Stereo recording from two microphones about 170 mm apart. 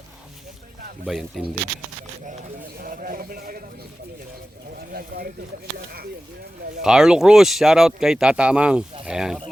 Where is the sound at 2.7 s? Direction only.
55° right (ahead or behind).